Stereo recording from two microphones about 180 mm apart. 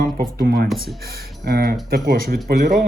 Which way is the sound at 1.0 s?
55° right (ahead or behind).